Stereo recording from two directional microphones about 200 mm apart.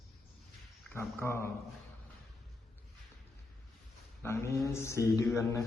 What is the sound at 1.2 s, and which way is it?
Speech, 10° left (ahead or behind).